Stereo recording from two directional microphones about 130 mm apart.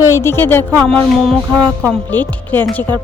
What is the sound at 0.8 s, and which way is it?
A woman's voice, 5° left (ahead or behind).